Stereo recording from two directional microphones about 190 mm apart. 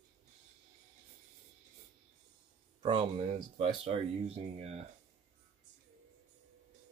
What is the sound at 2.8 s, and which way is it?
Speech, 30° right (ahead or behind).